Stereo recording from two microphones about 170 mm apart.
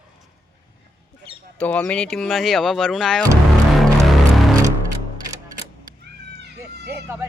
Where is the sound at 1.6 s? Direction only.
5° left (ahead or behind).